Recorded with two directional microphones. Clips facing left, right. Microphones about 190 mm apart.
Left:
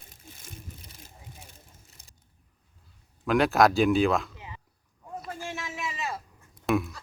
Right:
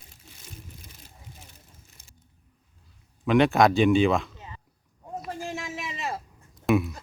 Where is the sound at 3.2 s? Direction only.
Centre (ahead or behind).